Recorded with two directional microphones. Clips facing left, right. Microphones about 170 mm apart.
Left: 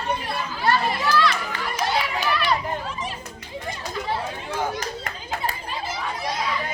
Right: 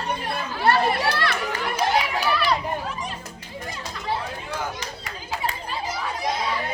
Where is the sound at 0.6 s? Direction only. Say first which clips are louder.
Right 2 dB; 65° right (ahead or behind).